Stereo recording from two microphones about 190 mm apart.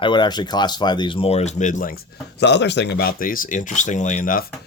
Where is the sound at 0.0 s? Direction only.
25° left (ahead or behind); by 2.0 s 45° left (ahead or behind).